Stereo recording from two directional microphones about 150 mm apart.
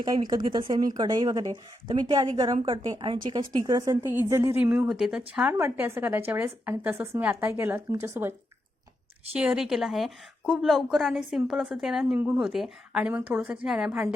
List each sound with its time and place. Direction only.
0.0 s a woman's voice: 25° right (ahead or behind); by 14.1 s 5° right (ahead or behind)